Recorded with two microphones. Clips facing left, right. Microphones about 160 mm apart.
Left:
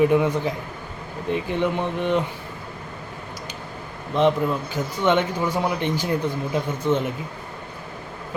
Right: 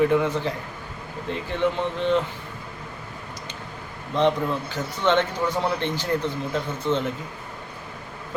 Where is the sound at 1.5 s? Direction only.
15° left (ahead or behind).